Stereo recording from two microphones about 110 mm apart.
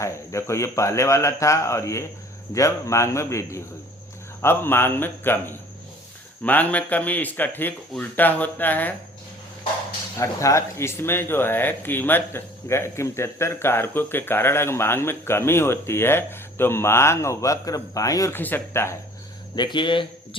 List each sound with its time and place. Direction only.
0.0 s speech: 25° left (ahead or behind)
10.2 s speech: 25° left (ahead or behind)
18.3 s speech: 20° left (ahead or behind)
19.5 s speech: 45° left (ahead or behind)